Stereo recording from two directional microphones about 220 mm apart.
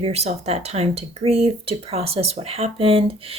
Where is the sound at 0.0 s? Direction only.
30° right (ahead or behind).